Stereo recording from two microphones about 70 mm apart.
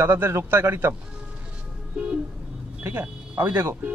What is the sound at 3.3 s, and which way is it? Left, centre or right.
Speech, right.